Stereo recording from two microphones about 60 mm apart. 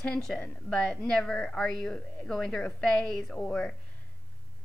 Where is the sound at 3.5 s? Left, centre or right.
Centre.